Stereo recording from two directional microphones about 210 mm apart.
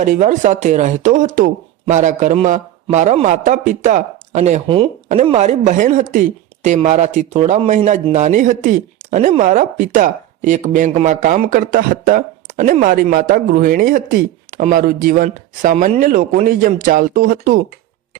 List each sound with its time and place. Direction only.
0.0 s a woman's voice: 35° right (ahead or behind)